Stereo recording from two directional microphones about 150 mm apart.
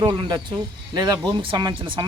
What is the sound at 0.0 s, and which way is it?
A man's voice, 25° right (ahead or behind).